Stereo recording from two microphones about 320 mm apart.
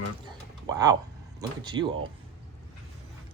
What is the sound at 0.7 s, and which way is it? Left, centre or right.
Speech, centre.